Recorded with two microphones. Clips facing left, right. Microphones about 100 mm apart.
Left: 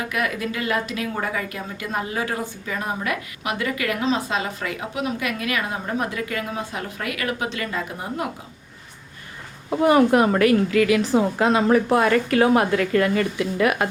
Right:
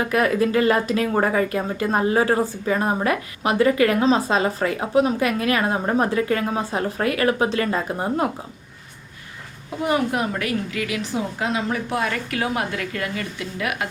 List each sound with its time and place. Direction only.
0.0 s speech: 35° right (ahead or behind)
9.6 s a woman's voice: 65° left (ahead or behind); by 13.8 s 45° left (ahead or behind)